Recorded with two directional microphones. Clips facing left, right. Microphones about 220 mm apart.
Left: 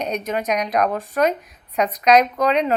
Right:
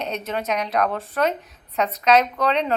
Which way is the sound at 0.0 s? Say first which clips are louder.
Left 3 dB; 15° left (ahead or behind).